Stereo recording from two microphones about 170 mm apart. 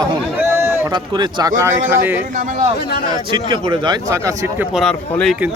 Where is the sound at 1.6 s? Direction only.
15° right (ahead or behind).